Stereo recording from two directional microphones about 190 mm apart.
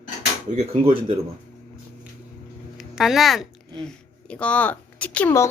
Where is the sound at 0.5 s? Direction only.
30° right (ahead or behind).